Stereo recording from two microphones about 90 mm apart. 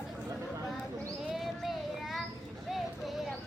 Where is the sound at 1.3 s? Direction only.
Centre (ahead or behind).